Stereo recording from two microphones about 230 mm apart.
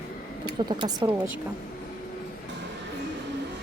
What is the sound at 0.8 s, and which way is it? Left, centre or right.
Speech, centre.